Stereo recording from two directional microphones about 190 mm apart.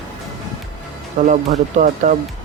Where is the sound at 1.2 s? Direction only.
40° right (ahead or behind).